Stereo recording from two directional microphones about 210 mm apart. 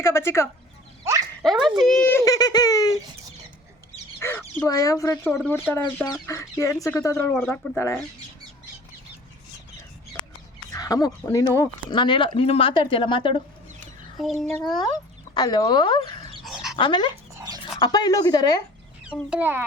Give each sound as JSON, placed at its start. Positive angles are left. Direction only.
{"t": 0.0, "sound": "speech", "side_deg": 15}
{"t": 1.4, "sound": "speech", "side_deg": 0}
{"t": 4.2, "sound": "speech", "side_deg": 10}
{"t": 10.7, "sound": "speech", "side_deg": 15}
{"t": 14.2, "sound": "a child's voice", "side_deg": 0}
{"t": 15.4, "sound": "speech", "side_deg": 20}
{"t": 16.4, "sound": "dog", "side_deg": -5}
{"t": 16.7, "sound": "speech", "side_deg": 20}
{"t": 17.3, "sound": "dog", "side_deg": -20}
{"t": 17.7, "sound": "speech", "side_deg": 20}
{"t": 19.0, "sound": "a child's voice", "side_deg": -5}